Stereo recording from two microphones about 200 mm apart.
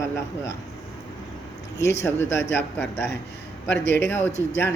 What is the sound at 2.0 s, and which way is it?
Speech, 10° left (ahead or behind).